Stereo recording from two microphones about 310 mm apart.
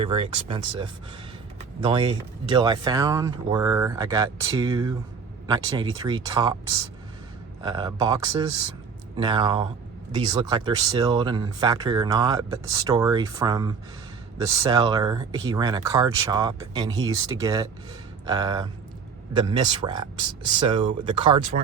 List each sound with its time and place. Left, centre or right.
0.0 s speech: centre